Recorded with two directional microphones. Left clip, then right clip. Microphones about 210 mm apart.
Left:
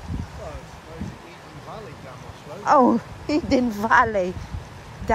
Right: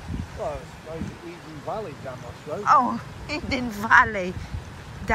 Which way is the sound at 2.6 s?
35° left (ahead or behind).